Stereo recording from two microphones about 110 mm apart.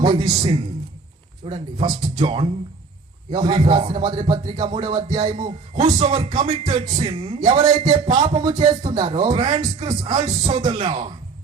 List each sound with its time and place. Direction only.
0.0 s a man's voice: 45° right (ahead or behind)
6.4 s music: 90° right
6.7 s music: 50° right (ahead or behind)
7.3 s a man's voice: 40° right (ahead or behind)